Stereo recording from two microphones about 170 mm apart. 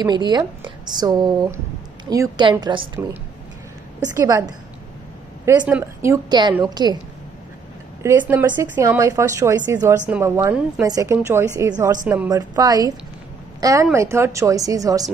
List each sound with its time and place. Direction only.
0.0 s a woman's voice: 25° right (ahead or behind)
4.3 s a woman's voice: 20° right (ahead or behind)
8.0 s a woman's voice: 15° right (ahead or behind)